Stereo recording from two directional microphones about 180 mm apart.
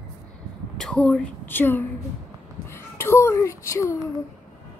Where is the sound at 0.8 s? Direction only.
Centre (ahead or behind).